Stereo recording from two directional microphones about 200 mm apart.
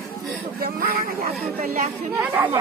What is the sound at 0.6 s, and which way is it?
Speech, 50° right (ahead or behind).